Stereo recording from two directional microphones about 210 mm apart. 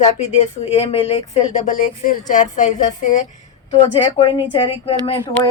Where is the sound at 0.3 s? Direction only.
30° left (ahead or behind).